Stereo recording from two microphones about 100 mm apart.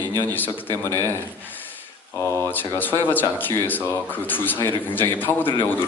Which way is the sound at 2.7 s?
20° left (ahead or behind).